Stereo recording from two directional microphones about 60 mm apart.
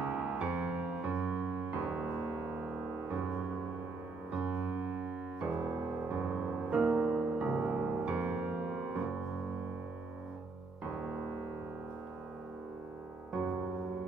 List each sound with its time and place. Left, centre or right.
0.0 s music: right
4.4 s piano: right
6.9 s music: centre
10.9 s keyboard: right